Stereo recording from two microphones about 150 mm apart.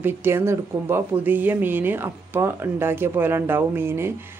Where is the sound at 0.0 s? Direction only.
15° right (ahead or behind).